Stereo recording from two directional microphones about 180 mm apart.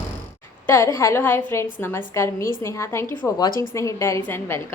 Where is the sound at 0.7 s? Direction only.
15° left (ahead or behind).